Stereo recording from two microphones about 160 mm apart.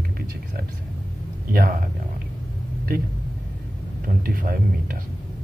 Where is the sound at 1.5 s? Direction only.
65° right (ahead or behind).